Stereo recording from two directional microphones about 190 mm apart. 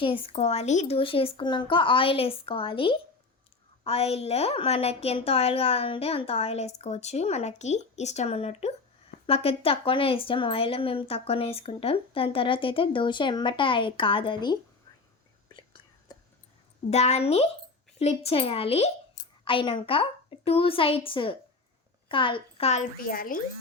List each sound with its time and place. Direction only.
0.0 s a woman's voice: 30° left (ahead or behind)
16.1 s a sound: 20° left (ahead or behind)
16.9 s a woman's voice: 35° left (ahead or behind)